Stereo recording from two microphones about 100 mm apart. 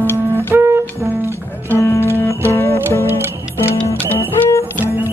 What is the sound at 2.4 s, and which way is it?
Music, 25° left (ahead or behind).